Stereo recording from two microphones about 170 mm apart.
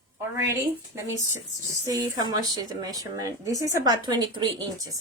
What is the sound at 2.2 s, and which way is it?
Speech, 25° right (ahead or behind).